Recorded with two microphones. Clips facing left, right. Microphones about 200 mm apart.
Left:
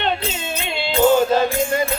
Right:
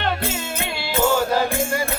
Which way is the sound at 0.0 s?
20° left (ahead or behind).